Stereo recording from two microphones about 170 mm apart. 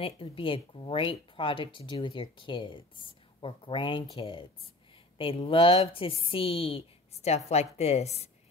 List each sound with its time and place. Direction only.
0.0 s a woman's voice: 30° left (ahead or behind)